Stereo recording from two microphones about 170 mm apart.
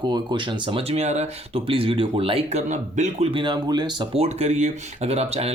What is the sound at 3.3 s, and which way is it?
A man's voice, 25° right (ahead or behind).